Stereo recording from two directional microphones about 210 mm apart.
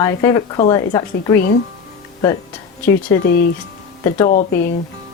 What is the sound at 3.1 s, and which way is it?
Speech, 15° left (ahead or behind).